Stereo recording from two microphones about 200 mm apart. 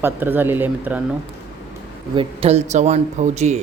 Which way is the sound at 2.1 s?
30° right (ahead or behind).